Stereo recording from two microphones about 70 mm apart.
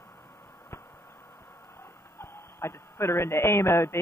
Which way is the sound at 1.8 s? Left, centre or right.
Left.